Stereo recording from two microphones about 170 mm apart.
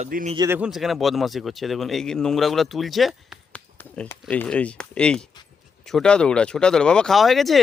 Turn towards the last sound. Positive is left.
turn(degrees=0)  # may be behind; listen again after turning